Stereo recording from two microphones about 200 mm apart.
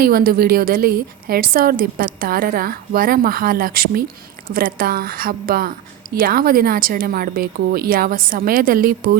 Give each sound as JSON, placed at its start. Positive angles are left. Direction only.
{"t": 0.0, "sound": "a woman's voice", "side_deg": -45}